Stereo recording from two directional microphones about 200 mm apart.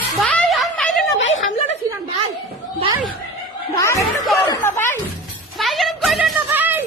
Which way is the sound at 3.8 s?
15° left (ahead or behind).